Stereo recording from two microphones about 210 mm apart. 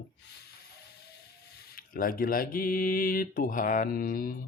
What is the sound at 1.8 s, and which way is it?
Speech, 45° left (ahead or behind).